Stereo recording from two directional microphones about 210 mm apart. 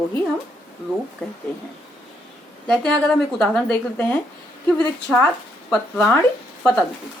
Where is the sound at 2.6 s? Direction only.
5° left (ahead or behind).